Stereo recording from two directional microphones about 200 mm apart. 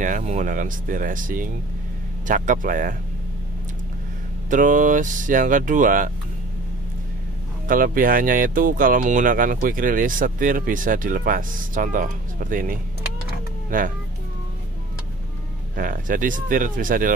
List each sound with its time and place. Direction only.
0.0 s speech: 35° right (ahead or behind)
4.5 s speech: 40° right (ahead or behind)
7.6 s speech: 45° right (ahead or behind)
15.7 s speech: 45° right (ahead or behind)